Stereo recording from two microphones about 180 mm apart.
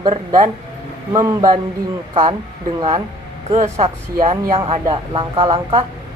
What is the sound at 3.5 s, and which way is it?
Speech, 40° right (ahead or behind).